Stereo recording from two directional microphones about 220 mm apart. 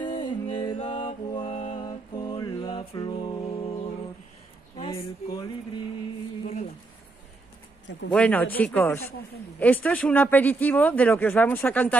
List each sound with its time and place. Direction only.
0.0 s music: 20° left (ahead or behind)
4.7 s a sound: 20° left (ahead or behind)
8.1 s speech: 5° left (ahead or behind)